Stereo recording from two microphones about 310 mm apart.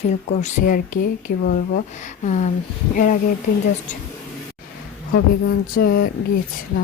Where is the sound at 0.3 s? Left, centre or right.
Left.